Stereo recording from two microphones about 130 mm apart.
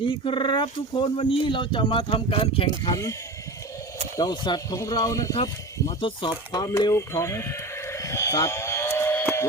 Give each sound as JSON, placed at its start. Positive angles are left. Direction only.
{"t": 0.0, "sound": "speech", "side_deg": 40}
{"t": 2.9, "sound": "speech", "side_deg": 25}
{"t": 4.2, "sound": "speech", "side_deg": 30}
{"t": 6.0, "sound": "speech", "side_deg": 40}
{"t": 6.5, "sound": "sheep", "side_deg": 25}